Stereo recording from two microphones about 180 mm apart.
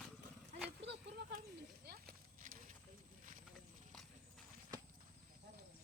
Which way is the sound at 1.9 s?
60° right (ahead or behind).